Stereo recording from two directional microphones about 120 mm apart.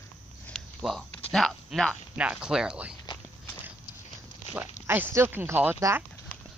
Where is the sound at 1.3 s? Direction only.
Centre (ahead or behind).